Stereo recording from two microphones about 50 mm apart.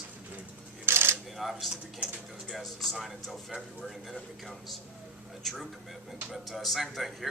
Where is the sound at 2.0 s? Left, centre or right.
Right.